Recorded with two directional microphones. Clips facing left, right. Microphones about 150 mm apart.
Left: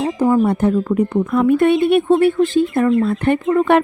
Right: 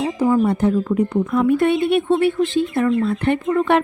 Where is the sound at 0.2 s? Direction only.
50° left (ahead or behind).